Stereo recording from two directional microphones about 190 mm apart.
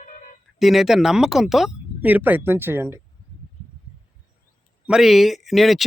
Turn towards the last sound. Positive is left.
turn(degrees=0)  # may be behind; listen again after turning